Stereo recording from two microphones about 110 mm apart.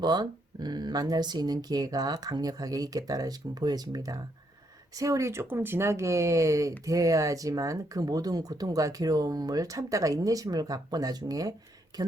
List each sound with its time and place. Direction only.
0.0 s speech: 40° right (ahead or behind)